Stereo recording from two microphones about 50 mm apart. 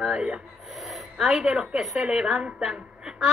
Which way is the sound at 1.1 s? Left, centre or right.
Centre.